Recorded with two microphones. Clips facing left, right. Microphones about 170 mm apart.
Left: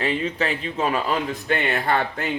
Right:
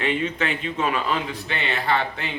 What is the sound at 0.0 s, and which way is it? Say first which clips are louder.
A man's voice: left 1 dB; 35° left (ahead or behind).